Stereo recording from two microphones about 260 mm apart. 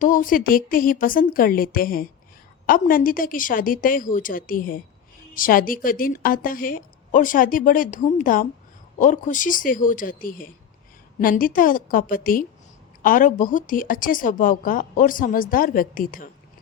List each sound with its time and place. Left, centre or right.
0.0 s a woman's voice: left